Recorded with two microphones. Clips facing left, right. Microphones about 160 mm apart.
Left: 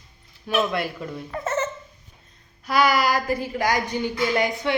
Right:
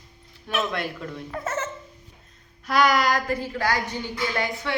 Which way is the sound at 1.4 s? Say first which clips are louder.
Left 4 dB; 10° right (ahead or behind).